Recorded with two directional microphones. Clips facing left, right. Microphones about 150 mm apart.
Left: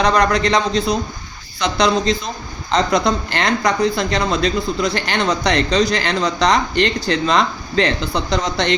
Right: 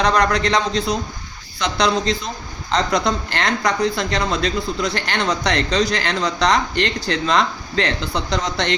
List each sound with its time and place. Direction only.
0.0 s speech: 10° left (ahead or behind)